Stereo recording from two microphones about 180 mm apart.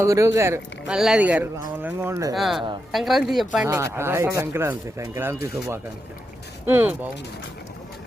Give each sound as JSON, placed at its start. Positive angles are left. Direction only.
{"t": 0.0, "sound": "speech", "side_deg": -15}
{"t": 0.9, "sound": "speech", "side_deg": -5}
{"t": 2.3, "sound": "speech", "side_deg": 0}
{"t": 3.7, "sound": "speech", "side_deg": -15}
{"t": 6.7, "sound": "speech", "side_deg": -10}